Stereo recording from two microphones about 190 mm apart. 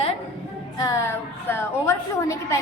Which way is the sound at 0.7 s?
15° left (ahead or behind).